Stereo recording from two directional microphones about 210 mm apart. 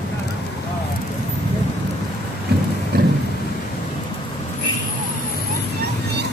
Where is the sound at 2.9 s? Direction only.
45° right (ahead or behind).